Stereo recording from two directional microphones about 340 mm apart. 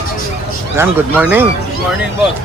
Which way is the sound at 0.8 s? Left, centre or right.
Centre.